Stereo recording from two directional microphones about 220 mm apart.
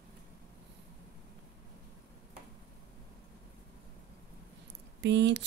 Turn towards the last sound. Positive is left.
turn(degrees=-50)  # may be behind; listen again after turning